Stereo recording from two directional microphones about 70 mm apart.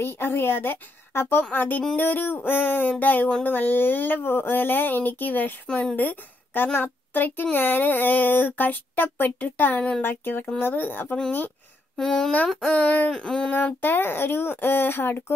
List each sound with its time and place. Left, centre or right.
0.0 s a woman's voice: left
12.0 s speech: centre
13.1 s speech: centre
13.5 s speech: left